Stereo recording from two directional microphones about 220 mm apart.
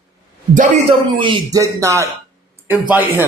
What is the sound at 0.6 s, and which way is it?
Speech, 25° right (ahead or behind).